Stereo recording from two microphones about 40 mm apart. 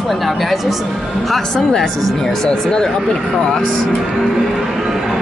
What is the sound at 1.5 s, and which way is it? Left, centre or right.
Speech, centre.